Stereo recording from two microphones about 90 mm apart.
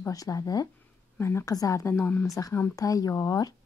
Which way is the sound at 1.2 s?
30° left (ahead or behind).